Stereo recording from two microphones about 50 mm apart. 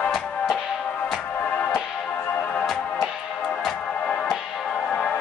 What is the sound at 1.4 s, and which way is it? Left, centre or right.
Music, left.